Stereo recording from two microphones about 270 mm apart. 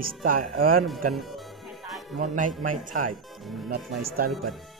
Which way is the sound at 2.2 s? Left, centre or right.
Right.